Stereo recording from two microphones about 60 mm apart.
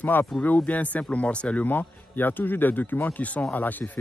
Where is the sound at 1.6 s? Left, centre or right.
Left.